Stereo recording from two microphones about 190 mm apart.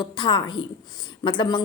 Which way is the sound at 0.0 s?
25° left (ahead or behind).